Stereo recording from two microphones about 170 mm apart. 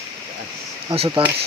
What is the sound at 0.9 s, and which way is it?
Speech, 35° right (ahead or behind).